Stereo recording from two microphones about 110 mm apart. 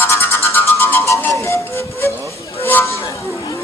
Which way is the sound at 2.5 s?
20° left (ahead or behind).